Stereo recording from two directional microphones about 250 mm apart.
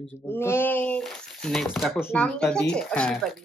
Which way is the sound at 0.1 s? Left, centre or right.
Centre.